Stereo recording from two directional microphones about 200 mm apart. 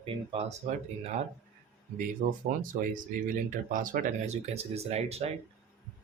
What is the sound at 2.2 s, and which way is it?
Speech, 40° right (ahead or behind).